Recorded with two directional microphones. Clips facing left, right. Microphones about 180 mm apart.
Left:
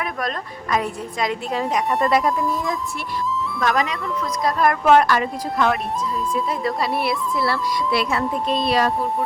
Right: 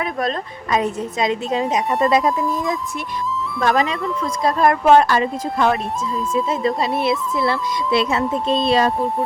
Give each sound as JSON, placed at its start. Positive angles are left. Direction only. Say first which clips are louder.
{"t": 0.0, "sound": "speech", "louder": "right 4 dB", "side_deg": -25}
{"t": 3.6, "sound": "speech", "louder": "right 4 dB", "side_deg": -30}